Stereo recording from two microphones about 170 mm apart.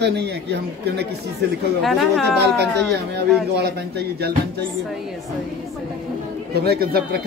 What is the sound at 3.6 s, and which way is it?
Speech, 75° right (ahead or behind).